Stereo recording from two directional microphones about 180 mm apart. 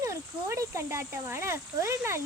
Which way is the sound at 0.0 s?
15° right (ahead or behind).